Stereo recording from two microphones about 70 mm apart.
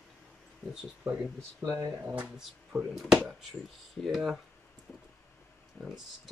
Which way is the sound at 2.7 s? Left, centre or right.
Centre.